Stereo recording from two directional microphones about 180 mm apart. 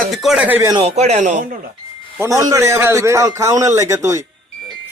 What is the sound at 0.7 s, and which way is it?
Speech, 30° right (ahead or behind).